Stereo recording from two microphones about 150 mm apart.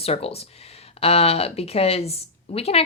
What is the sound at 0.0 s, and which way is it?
Speech, 40° left (ahead or behind).